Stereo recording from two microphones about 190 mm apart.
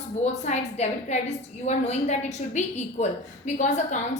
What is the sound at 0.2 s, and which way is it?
A woman's voice, 35° left (ahead or behind).